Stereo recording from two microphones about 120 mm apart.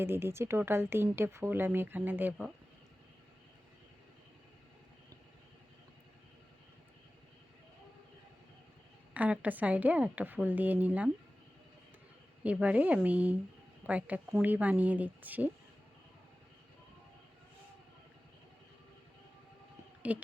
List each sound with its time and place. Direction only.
0.0 s speech: 20° right (ahead or behind)
9.1 s a woman's voice: 10° right (ahead or behind)
12.4 s a woman's voice: 10° right (ahead or behind)
20.0 s speech: 10° right (ahead or behind)